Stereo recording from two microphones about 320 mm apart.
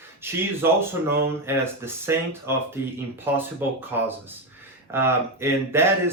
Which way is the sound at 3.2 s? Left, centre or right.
Centre.